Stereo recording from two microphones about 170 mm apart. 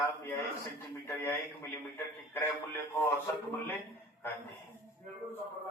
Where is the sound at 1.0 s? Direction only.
15° left (ahead or behind).